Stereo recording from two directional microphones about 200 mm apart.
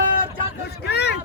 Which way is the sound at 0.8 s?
55° left (ahead or behind).